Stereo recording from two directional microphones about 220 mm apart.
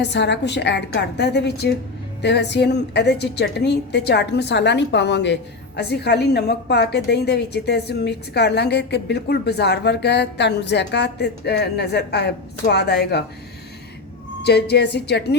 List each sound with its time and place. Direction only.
0.0 s a woman's voice: 50° left (ahead or behind)
14.4 s a woman's voice: 50° left (ahead or behind)